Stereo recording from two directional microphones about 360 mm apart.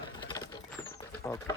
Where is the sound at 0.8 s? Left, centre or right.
Centre.